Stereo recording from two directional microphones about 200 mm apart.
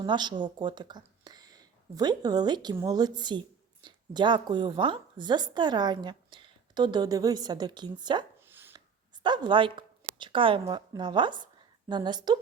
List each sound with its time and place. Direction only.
0.0 s speech: 20° right (ahead or behind)
8.4 s a sound: 10° right (ahead or behind)
9.2 s speech: 20° right (ahead or behind)